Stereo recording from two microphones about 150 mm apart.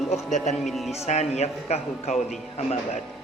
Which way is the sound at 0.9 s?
45° left (ahead or behind).